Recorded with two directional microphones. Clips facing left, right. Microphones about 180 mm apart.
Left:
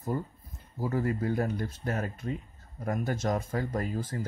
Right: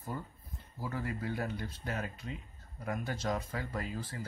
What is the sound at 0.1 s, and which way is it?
Speech, 40° left (ahead or behind).